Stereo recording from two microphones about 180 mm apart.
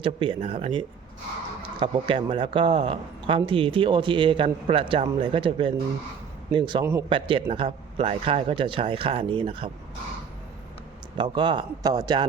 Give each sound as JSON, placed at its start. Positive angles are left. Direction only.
{"t": 0.0, "sound": "a man's voice", "side_deg": -30}
{"t": 11.2, "sound": "a man's voice", "side_deg": -25}